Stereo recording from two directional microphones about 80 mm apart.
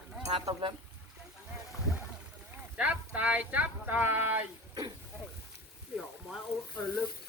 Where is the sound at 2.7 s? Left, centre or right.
Centre.